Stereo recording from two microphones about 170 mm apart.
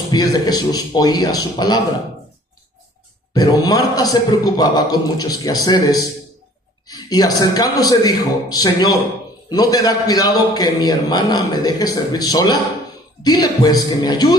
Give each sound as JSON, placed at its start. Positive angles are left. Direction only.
{"t": 0.1, "sound": "a man's voice", "side_deg": 25}
{"t": 3.3, "sound": "a man's voice", "side_deg": 20}